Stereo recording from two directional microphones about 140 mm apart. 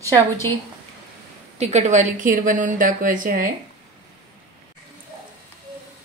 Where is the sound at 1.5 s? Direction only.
55° right (ahead or behind); by 3.5 s 75° right (ahead or behind).